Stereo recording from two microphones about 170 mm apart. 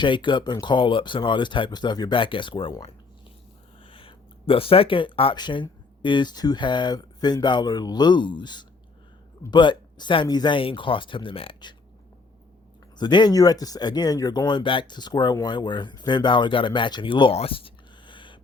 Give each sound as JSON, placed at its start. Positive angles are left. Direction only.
{"t": 0.0, "sound": "speech", "side_deg": 25}
{"t": 13.0, "sound": "speech", "side_deg": 25}